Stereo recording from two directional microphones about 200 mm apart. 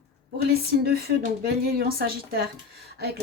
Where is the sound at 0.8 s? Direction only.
50° right (ahead or behind).